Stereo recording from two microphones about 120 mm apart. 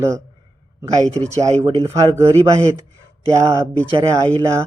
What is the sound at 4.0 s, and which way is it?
Speech, 30° right (ahead or behind).